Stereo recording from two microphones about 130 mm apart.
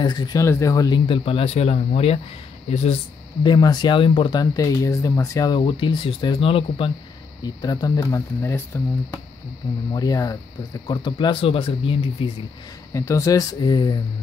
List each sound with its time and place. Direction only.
0.0 s speech: 35° left (ahead or behind); by 3.0 s 60° left (ahead or behind)
3.4 s speech: 35° left (ahead or behind)
5.6 s speech: 40° left (ahead or behind)
7.4 s speech: 30° left (ahead or behind)
12.9 s speech: 20° left (ahead or behind)